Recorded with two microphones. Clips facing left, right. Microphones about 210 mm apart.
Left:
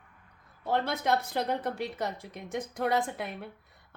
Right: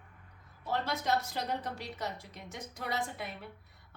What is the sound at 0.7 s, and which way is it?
A woman's voice, 55° left (ahead or behind).